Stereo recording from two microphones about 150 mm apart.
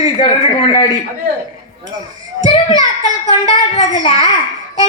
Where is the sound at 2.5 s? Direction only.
35° left (ahead or behind).